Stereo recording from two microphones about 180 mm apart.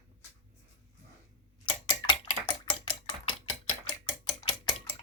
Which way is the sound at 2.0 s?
25° left (ahead or behind).